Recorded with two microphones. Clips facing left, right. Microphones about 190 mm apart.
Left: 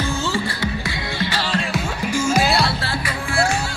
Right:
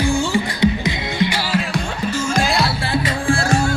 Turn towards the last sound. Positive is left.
turn(degrees=-30)  # may be behind; listen again after turning